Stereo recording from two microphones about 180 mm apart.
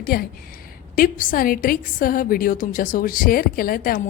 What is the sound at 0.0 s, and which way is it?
A woman's voice, 55° left (ahead or behind).